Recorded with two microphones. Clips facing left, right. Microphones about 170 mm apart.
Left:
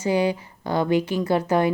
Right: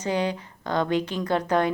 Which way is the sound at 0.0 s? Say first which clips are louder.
Left 4 dB; 10° left (ahead or behind).